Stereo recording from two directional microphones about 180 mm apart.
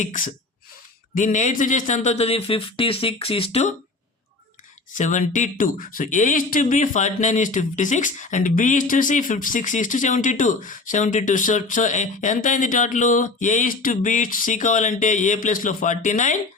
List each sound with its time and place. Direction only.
0.0 s speech: 45° left (ahead or behind)
4.9 s speech: 45° left (ahead or behind)